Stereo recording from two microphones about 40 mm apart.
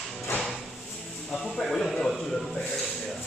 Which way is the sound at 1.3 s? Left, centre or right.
Centre.